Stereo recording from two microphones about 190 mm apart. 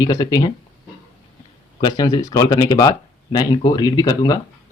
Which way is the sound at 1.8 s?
20° left (ahead or behind).